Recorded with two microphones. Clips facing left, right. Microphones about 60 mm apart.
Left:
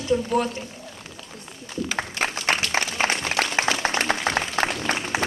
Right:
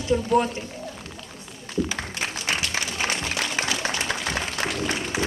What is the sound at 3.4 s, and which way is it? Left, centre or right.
Applause, left.